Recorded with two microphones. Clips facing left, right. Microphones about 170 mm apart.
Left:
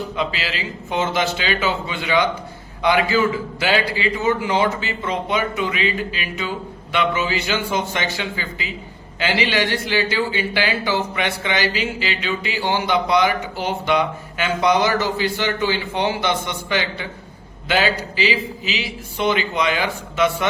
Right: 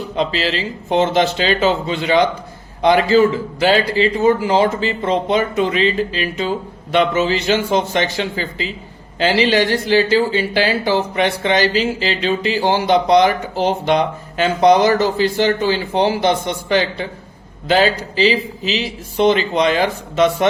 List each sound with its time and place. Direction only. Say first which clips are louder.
0.2 s speech: right 8 dB; 35° right (ahead or behind)